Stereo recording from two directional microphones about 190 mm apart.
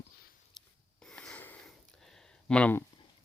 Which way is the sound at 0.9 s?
5° left (ahead or behind).